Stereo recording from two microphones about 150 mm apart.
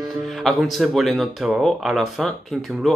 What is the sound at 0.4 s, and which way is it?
Speech, centre (ahead or behind).